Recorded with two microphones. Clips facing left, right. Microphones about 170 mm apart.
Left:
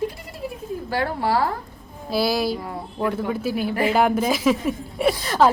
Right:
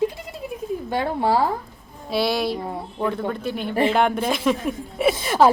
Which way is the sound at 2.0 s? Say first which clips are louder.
Even; centre (ahead or behind).